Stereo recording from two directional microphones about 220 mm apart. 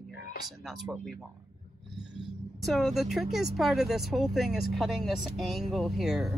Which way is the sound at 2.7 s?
Centre (ahead or behind).